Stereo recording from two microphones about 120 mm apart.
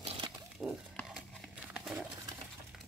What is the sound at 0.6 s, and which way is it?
Pig, 5° right (ahead or behind).